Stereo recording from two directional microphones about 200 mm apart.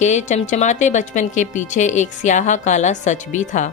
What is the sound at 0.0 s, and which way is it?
A woman's voice, 35° left (ahead or behind).